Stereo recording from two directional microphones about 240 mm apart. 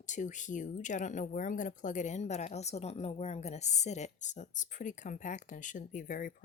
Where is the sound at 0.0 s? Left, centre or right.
Left.